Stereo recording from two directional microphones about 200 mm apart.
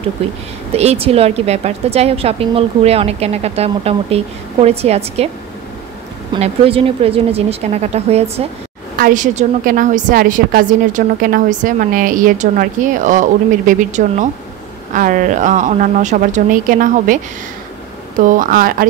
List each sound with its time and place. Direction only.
0.7 s a woman's voice: 30° right (ahead or behind)
6.3 s a woman's voice: 30° right (ahead or behind)
8.9 s a woman's voice: 40° right (ahead or behind)
18.2 s speech: 45° right (ahead or behind)